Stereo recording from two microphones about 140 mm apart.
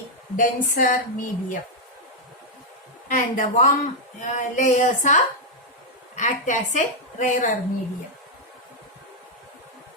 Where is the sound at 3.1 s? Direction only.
70° left (ahead or behind).